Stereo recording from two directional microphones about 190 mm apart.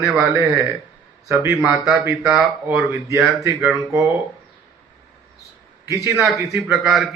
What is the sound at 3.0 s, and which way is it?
A man's voice, 15° right (ahead or behind).